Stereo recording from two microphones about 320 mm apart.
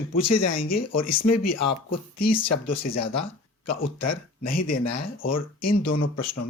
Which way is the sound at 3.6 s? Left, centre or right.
Left.